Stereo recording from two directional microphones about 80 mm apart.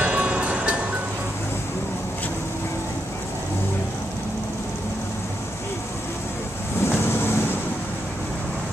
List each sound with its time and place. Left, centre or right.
0.0 s music: centre
6.8 s vehicle: left